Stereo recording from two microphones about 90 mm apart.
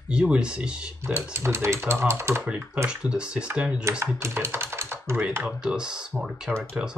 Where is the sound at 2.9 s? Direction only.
10° right (ahead or behind).